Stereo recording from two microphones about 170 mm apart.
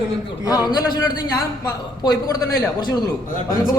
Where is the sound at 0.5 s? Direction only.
20° left (ahead or behind).